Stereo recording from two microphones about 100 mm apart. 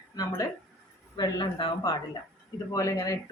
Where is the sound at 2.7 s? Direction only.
35° left (ahead or behind).